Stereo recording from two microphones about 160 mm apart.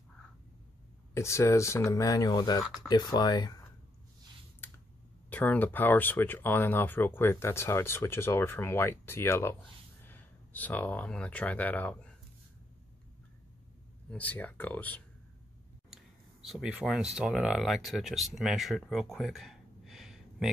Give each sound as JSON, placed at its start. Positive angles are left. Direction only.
{"t": 1.1, "sound": "speech", "side_deg": 15}
{"t": 2.6, "sound": "speech", "side_deg": 0}
{"t": 2.9, "sound": "speech", "side_deg": 25}
{"t": 5.3, "sound": "speech", "side_deg": 10}
{"t": 14.1, "sound": "speech", "side_deg": 10}
{"t": 15.9, "sound": "speech", "side_deg": 0}